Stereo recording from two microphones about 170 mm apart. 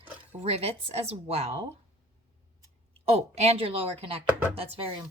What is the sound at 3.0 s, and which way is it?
Speech, 35° right (ahead or behind).